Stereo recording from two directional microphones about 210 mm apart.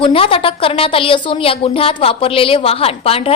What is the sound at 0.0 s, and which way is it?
Speech, 25° left (ahead or behind).